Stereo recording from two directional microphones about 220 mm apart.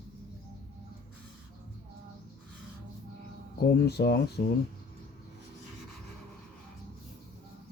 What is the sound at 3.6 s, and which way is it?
Speech, 50° left (ahead or behind).